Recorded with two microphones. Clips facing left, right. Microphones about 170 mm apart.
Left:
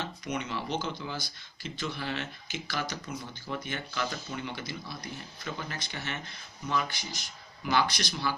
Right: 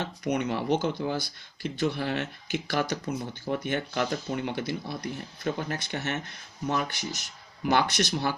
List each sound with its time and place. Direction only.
0.0 s speech: 55° right (ahead or behind)